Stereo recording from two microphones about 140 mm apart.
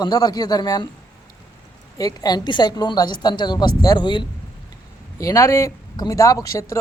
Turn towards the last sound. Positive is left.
turn(degrees=25)  # may be behind; listen again after turning